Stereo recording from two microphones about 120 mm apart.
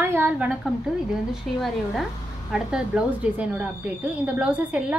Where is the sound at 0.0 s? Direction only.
20° right (ahead or behind).